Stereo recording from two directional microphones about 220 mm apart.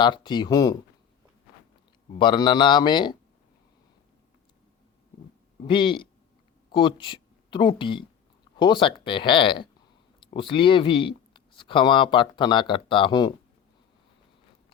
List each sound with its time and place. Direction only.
0.0 s speech: 20° left (ahead or behind)
2.1 s speech: 20° left (ahead or behind)
5.5 s speech: 20° left (ahead or behind)